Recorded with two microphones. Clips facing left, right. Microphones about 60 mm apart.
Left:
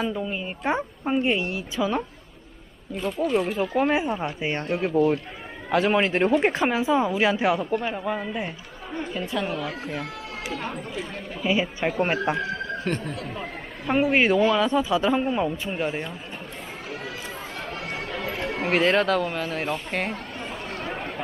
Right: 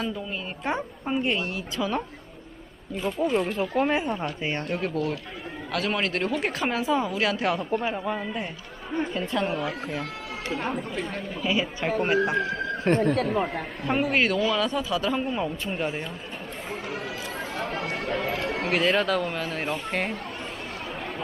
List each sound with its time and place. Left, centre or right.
0.0 s speech: centre
2.9 s speech: centre
5.7 s speech: left
7.6 s speech: centre
11.4 s speech: centre
11.9 s speech: left
13.0 s speech: right
13.8 s speech: centre
18.1 s chatter: centre
18.4 s speech: centre